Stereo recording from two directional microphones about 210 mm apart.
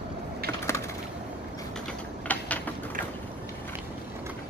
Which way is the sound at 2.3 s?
5° left (ahead or behind).